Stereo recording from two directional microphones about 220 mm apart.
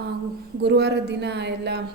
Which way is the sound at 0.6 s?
50° right (ahead or behind).